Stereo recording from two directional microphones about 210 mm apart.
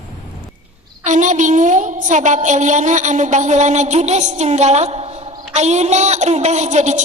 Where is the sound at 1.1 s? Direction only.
35° right (ahead or behind).